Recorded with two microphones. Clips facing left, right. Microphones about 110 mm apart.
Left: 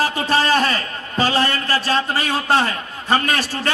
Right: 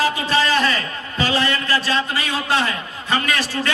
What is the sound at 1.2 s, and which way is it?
A man's voice, 40° left (ahead or behind).